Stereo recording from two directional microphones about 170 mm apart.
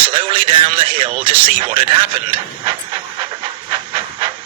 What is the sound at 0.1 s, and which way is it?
Speech, 30° right (ahead or behind).